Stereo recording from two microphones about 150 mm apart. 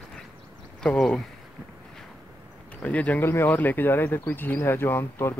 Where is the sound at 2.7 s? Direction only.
10° left (ahead or behind).